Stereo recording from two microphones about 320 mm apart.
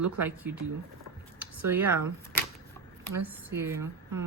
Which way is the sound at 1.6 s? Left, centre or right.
Right.